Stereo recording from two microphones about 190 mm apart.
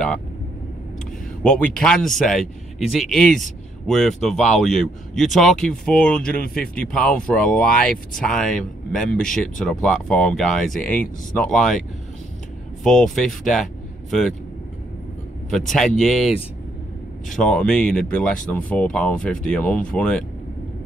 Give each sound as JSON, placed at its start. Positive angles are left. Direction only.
{"t": 1.8, "sound": "speech", "side_deg": 5}
{"t": 6.3, "sound": "speech", "side_deg": 55}
{"t": 6.6, "sound": "speech", "side_deg": 5}
{"t": 12.8, "sound": "speech", "side_deg": 0}
{"t": 15.5, "sound": "speech", "side_deg": 0}